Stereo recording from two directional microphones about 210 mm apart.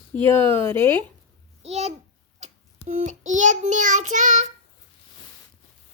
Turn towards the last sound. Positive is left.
turn(degrees=-35)  # may be behind; listen again after turning